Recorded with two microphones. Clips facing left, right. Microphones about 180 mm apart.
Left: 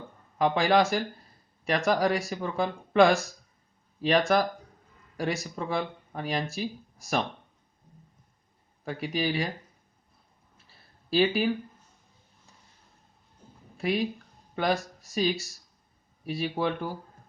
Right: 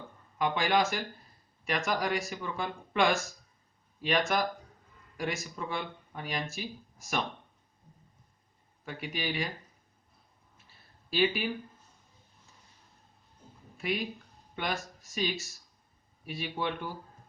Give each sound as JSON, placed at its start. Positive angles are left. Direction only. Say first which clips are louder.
{"t": 0.3, "sound": "speech", "louder": "left 5 dB", "side_deg": 35}
{"t": 8.8, "sound": "speech", "louder": "left 7 dB", "side_deg": 35}
{"t": 11.1, "sound": "speech", "louder": "left 5 dB", "side_deg": 35}
{"t": 13.7, "sound": "speech", "louder": "left 6 dB", "side_deg": 35}